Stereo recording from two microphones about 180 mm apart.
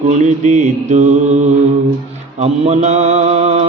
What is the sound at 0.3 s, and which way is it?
Mantra, 40° right (ahead or behind).